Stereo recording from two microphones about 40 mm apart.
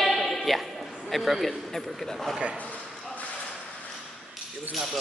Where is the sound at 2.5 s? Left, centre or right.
Left.